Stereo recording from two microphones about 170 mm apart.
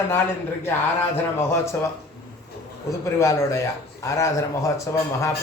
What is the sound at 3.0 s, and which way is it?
A man's voice, 15° left (ahead or behind).